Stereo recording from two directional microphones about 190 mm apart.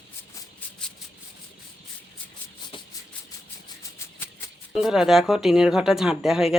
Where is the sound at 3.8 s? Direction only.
15° left (ahead or behind).